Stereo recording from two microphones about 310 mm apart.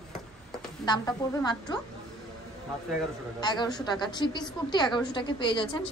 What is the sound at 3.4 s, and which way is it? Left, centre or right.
A woman's voice, centre.